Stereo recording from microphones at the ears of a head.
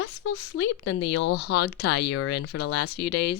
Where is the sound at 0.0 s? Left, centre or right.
Left.